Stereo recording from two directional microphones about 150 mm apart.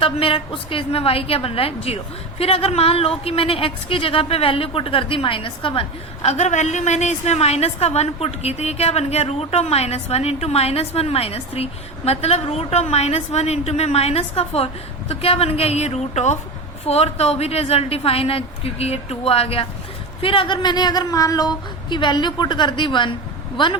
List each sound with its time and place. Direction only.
0.0 s speech: 35° left (ahead or behind)
6.2 s a woman's voice: 50° left (ahead or behind); by 23.7 s 30° left (ahead or behind)